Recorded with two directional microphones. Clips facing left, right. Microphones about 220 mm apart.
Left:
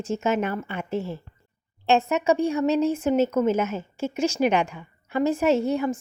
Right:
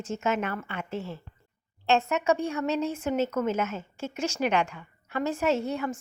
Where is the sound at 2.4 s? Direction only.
40° left (ahead or behind).